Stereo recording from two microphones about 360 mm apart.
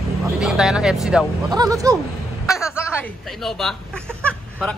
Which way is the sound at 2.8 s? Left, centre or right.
Centre.